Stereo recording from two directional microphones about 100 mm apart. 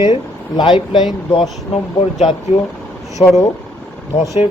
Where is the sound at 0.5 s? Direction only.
50° left (ahead or behind).